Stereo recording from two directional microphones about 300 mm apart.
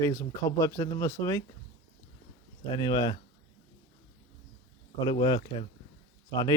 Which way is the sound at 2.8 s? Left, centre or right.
Centre.